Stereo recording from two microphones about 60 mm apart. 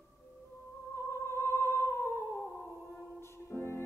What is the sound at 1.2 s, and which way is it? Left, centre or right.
Singing, left.